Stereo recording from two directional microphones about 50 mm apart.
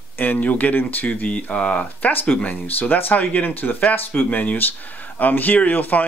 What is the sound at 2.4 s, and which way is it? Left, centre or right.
Speech, left.